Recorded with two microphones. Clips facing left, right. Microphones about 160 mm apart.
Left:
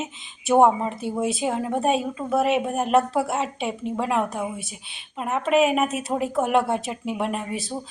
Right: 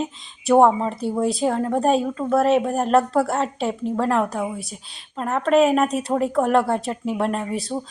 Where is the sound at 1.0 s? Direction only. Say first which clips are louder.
Right 4 dB; centre (ahead or behind).